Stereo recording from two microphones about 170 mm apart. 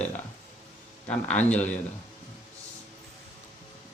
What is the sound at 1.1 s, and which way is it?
Speech, 5° left (ahead or behind).